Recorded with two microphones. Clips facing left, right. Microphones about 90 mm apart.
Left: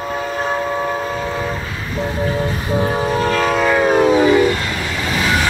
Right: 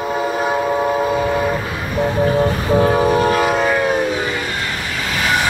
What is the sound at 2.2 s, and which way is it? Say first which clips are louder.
Vehicle: right 5 dB; 60° right (ahead or behind).